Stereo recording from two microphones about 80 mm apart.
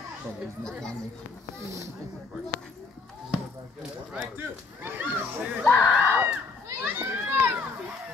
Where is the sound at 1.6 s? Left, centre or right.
Right.